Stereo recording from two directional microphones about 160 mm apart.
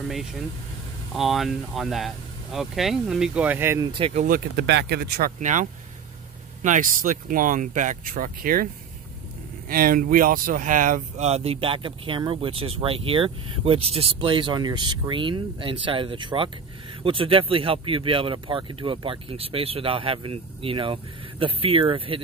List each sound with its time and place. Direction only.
1.1 s speech: centre (ahead or behind)
4.1 s speech: 55° right (ahead or behind)
4.6 s speech: 90° right
5.4 s speech: 50° right (ahead or behind)
9.7 s speech: 65° right (ahead or behind); by 22.2 s 35° right (ahead or behind)